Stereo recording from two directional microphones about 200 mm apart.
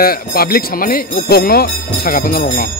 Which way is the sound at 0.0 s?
50° left (ahead or behind).